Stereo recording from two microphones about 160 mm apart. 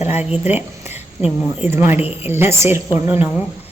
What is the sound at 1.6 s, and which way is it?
A woman's voice, 15° right (ahead or behind).